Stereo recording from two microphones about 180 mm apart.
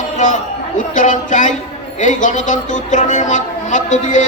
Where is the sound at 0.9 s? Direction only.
45° left (ahead or behind).